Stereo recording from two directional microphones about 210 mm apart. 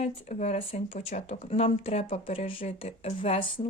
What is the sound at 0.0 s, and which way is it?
Speech, 30° left (ahead or behind).